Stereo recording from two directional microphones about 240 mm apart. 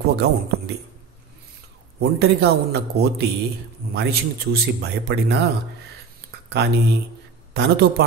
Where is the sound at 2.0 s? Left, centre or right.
Right.